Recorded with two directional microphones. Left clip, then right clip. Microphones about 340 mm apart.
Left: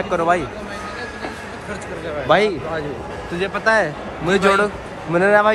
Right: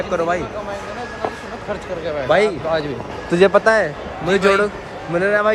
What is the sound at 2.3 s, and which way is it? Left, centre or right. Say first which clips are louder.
Speech: even; centre.